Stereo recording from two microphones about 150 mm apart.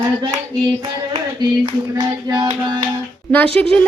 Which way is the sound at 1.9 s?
30° right (ahead or behind).